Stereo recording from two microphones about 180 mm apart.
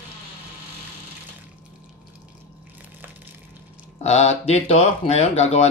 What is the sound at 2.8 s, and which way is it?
Crushing, 10° right (ahead or behind).